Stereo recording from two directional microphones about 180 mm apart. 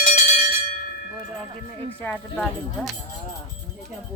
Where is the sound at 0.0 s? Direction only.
45° left (ahead or behind).